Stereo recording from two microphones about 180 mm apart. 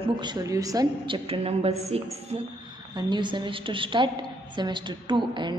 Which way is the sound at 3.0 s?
25° right (ahead or behind).